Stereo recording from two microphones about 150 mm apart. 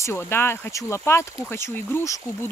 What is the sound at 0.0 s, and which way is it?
Speech, 15° left (ahead or behind).